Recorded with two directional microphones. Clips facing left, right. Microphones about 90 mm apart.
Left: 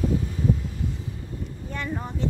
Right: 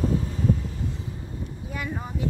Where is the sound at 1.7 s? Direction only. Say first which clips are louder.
Left 1 dB; 10° right (ahead or behind).